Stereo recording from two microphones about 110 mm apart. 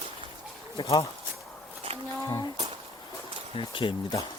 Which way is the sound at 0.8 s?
45° left (ahead or behind).